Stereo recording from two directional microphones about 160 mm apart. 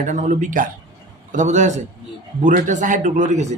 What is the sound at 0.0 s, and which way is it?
Speech, 50° right (ahead or behind).